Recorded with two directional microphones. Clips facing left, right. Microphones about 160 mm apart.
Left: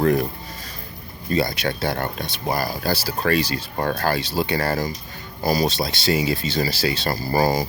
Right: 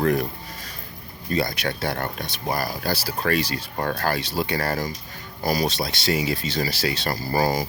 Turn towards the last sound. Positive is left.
turn(degrees=35)  # may be behind; listen again after turning